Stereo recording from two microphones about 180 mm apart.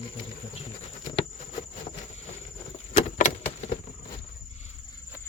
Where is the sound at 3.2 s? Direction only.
40° left (ahead or behind).